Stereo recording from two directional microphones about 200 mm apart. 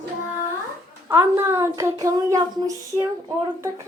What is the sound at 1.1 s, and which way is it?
Speech, 15° right (ahead or behind).